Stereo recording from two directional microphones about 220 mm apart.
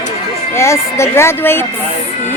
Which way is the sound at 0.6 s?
15° left (ahead or behind).